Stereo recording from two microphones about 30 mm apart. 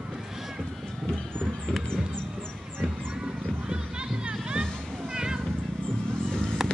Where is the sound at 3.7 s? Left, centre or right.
Right.